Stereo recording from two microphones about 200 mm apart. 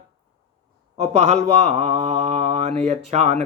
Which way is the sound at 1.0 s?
35° right (ahead or behind).